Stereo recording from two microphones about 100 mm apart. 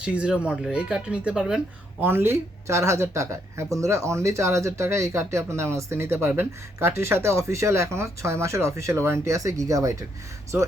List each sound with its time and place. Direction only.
0.0 s speech: 10° right (ahead or behind)
2.0 s speech: 20° right (ahead or behind)